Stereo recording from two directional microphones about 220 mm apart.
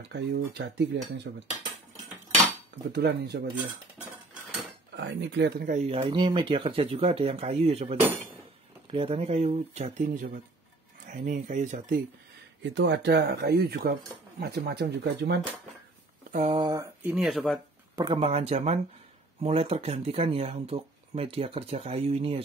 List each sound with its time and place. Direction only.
0.1 s speech: 50° right (ahead or behind)
1.3 s cutlery: 55° right (ahead or behind)
2.9 s speech: 50° right (ahead or behind)
4.9 s speech: 55° right (ahead or behind)
5.7 s speech: 30° right (ahead or behind)
12.7 s speech: 55° right (ahead or behind)
16.3 s a sound: 35° right (ahead or behind)
16.5 s speech: 15° right (ahead or behind); by 17.6 s centre (ahead or behind)
17.9 s speech: 20° right (ahead or behind)